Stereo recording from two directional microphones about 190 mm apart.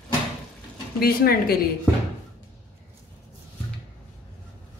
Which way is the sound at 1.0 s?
50° left (ahead or behind).